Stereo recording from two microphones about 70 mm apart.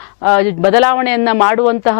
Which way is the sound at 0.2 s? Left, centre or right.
Left.